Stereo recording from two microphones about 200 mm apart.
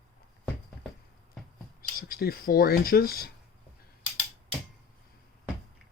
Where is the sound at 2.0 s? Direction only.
50° left (ahead or behind).